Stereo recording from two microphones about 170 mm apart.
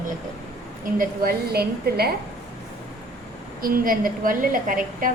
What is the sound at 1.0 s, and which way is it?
A woman's voice, 65° right (ahead or behind).